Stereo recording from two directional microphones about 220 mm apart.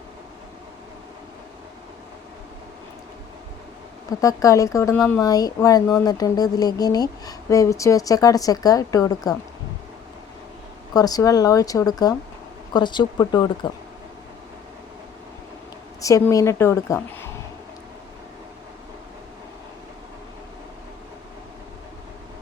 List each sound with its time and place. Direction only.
4.2 s speech: 15° left (ahead or behind)
10.9 s speech: 15° left (ahead or behind)
16.0 s speech: 15° left (ahead or behind)